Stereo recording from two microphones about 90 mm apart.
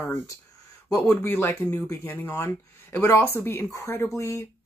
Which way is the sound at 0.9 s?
35° left (ahead or behind).